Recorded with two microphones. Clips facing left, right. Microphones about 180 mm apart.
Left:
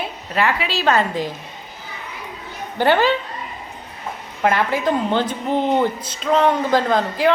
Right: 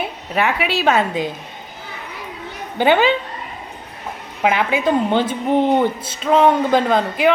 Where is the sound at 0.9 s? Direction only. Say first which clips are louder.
Even; 20° right (ahead or behind).